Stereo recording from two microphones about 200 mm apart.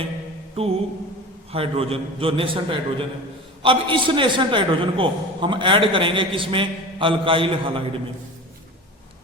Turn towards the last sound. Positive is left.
turn(degrees=-25)  # may be behind; listen again after turning